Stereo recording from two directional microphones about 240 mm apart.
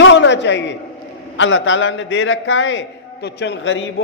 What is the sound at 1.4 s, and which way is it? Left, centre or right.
A man's voice, left.